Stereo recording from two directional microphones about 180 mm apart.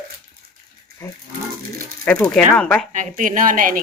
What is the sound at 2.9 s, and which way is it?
Speech, 45° right (ahead or behind).